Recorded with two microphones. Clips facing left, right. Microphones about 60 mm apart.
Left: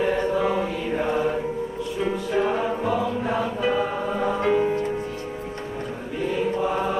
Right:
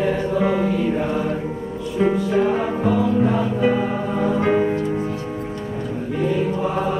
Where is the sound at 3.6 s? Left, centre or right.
Centre.